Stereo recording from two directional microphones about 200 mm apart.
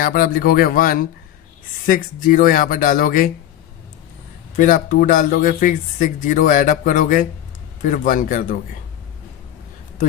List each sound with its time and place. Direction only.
0.0 s speech: 45° left (ahead or behind)
4.5 s a man's voice: 40° left (ahead or behind)